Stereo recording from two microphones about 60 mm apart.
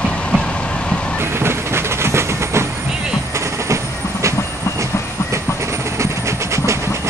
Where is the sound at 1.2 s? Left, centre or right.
Right.